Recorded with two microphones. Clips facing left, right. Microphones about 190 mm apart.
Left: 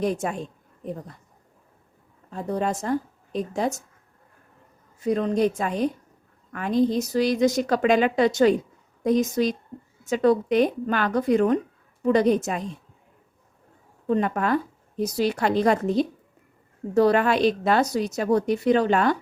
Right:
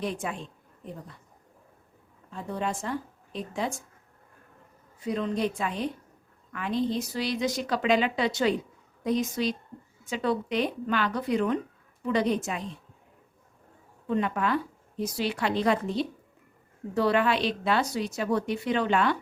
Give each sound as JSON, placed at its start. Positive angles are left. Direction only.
{"t": 0.0, "sound": "a woman's voice", "side_deg": 45}
{"t": 2.3, "sound": "a woman's voice", "side_deg": 40}
{"t": 5.0, "sound": "a woman's voice", "side_deg": 45}
{"t": 14.1, "sound": "a woman's voice", "side_deg": 45}